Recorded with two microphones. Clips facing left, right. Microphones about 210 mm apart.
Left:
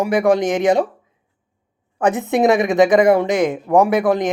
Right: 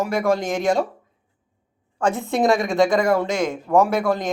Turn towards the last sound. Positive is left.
turn(degrees=15)  # may be behind; listen again after turning